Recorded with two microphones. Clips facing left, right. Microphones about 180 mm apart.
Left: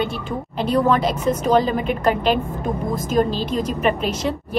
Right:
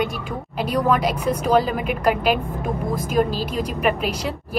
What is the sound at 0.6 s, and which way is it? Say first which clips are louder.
A woman's voice: left 2 dB; 10° right (ahead or behind).